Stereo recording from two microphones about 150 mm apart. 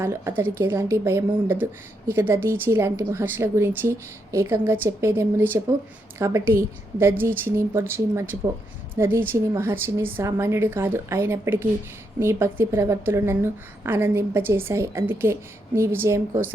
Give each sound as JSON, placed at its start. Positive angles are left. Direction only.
{"t": 0.0, "sound": "a woman's voice", "side_deg": -15}